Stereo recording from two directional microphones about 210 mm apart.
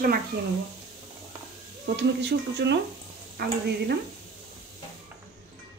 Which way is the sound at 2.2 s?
55° right (ahead or behind).